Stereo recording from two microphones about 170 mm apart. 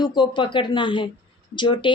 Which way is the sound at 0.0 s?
25° left (ahead or behind).